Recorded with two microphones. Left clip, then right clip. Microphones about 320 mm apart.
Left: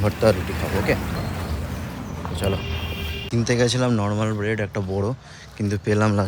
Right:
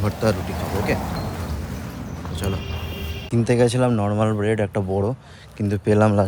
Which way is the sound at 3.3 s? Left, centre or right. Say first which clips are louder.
Right 2 dB; centre.